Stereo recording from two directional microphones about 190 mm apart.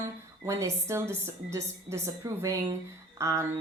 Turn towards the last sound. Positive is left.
turn(degrees=-15)  # may be behind; listen again after turning